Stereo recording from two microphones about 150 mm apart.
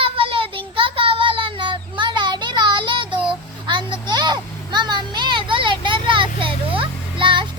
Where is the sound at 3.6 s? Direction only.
30° right (ahead or behind).